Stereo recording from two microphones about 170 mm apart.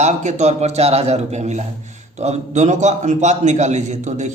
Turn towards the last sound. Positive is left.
turn(degrees=-45)  # may be behind; listen again after turning